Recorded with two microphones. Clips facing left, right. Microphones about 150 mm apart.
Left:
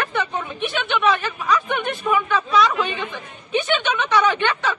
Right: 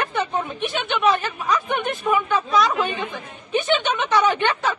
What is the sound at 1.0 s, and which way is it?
Speech, 45° right (ahead or behind).